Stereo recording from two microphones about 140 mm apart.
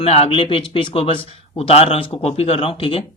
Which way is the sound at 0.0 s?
45° left (ahead or behind).